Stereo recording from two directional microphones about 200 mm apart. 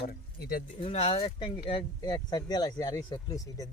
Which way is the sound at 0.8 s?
30° left (ahead or behind).